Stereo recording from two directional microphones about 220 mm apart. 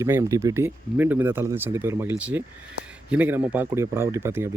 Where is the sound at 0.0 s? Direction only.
15° right (ahead or behind).